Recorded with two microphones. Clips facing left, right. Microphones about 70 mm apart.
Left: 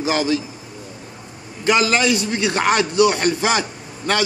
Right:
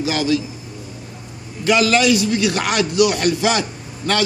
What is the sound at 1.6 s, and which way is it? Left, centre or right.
A man's voice, left.